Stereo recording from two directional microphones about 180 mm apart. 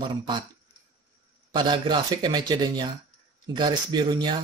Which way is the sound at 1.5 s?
25° right (ahead or behind).